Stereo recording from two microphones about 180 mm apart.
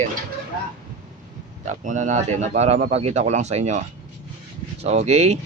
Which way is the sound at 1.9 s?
45° right (ahead or behind).